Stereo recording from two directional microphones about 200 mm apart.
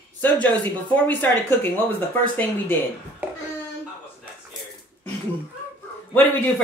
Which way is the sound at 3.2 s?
10° right (ahead or behind).